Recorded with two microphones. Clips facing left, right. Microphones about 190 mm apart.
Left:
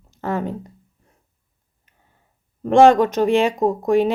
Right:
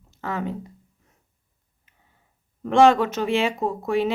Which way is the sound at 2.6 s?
45° left (ahead or behind).